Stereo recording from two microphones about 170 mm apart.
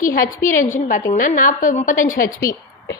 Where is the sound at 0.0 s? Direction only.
55° left (ahead or behind).